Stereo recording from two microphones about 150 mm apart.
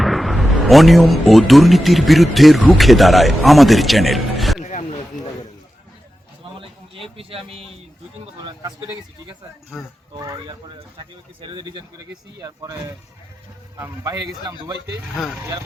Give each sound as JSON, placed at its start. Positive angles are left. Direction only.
{"t": 0.0, "sound": "speech", "side_deg": 0}
{"t": 4.6, "sound": "a sound", "side_deg": 45}
{"t": 6.6, "sound": "a sound", "side_deg": -35}
{"t": 9.7, "sound": "speech", "side_deg": 0}
{"t": 10.2, "sound": "speech", "side_deg": -25}
{"t": 13.7, "sound": "speech", "side_deg": -20}
{"t": 15.1, "sound": "speech", "side_deg": 0}